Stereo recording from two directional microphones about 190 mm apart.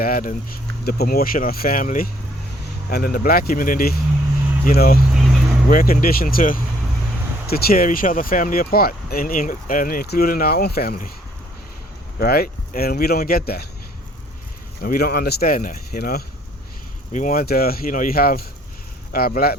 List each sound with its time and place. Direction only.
0.0 s speech: 50° left (ahead or behind)
12.2 s speech: 55° left (ahead or behind)
14.8 s speech: 50° left (ahead or behind)
17.1 s speech: 40° left (ahead or behind)